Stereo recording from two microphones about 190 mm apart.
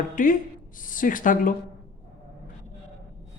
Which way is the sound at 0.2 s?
45° left (ahead or behind).